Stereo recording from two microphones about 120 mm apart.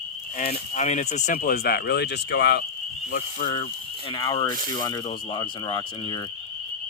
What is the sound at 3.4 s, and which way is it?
Speech, 60° left (ahead or behind).